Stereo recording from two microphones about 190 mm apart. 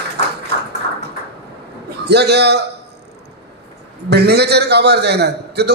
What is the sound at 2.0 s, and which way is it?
Speech, 60° right (ahead or behind).